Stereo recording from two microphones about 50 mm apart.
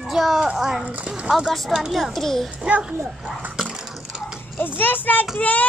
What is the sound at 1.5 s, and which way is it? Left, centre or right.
Speech, centre.